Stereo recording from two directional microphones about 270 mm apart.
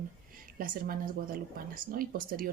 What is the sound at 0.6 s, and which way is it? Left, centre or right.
Speech, right.